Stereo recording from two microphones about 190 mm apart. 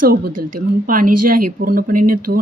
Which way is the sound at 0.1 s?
50° right (ahead or behind).